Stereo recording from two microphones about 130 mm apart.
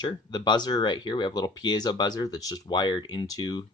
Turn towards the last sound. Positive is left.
turn(degrees=30)  # may be behind; listen again after turning